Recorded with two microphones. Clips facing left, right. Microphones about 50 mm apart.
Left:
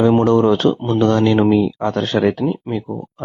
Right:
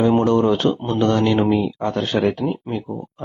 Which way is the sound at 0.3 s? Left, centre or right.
Left.